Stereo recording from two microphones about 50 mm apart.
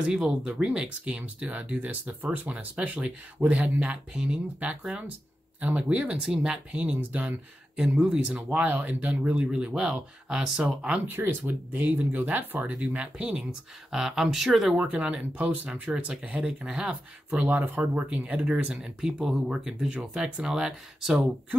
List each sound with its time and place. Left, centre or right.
0.2 s speech: centre; by 4.0 s right
4.1 s speech: centre
4.6 s speech: right
6.2 s speech: centre
7.7 s speech: centre
8.4 s speech: right; by 10.7 s centre
11.1 s speech: right
13.2 s speech: centre
14.8 s speech: right
15.9 s speech: centre
17.4 s speech: right
18.7 s speech: centre